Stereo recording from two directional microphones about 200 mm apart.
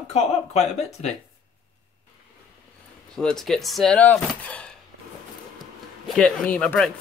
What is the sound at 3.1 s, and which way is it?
Speech, centre (ahead or behind).